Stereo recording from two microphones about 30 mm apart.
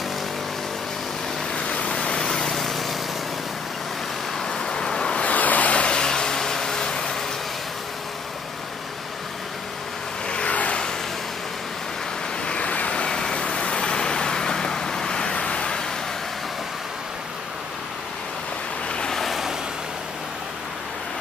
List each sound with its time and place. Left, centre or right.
1.6 s vehicle: left
2.0 s vehicle: left
2.3 s lawn mower: centre
4.6 s vehicle: left
5.2 s vehicle: left
5.8 s vehicle: left
6.0 s vehicle: left
10.4 s vehicle: left
12.4 s vehicle: left
13.1 s vehicle: left
15.3 s vehicle: left